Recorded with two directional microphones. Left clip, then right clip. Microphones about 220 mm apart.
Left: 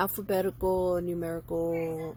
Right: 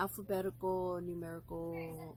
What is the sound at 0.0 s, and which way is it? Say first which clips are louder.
Speech: left 9 dB; 30° left (ahead or behind).